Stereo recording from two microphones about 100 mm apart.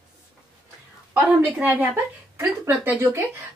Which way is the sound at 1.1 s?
15° right (ahead or behind).